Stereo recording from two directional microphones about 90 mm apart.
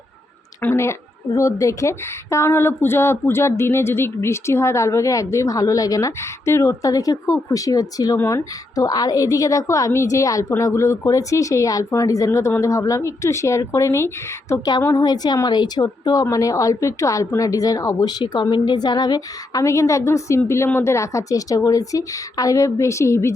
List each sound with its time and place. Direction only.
0.6 s a woman's voice: 25° left (ahead or behind); by 8.2 s 45° left (ahead or behind)
8.2 s speech: 25° left (ahead or behind)
8.7 s a woman's voice: 45° left (ahead or behind)